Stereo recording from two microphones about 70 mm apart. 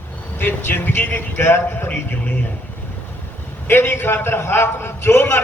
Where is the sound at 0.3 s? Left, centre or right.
Left.